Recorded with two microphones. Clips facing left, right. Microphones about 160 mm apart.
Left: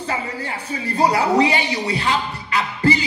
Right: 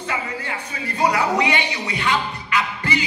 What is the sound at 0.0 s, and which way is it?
A man's voice, 35° left (ahead or behind).